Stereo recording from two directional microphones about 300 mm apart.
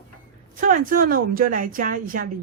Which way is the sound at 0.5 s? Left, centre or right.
Right.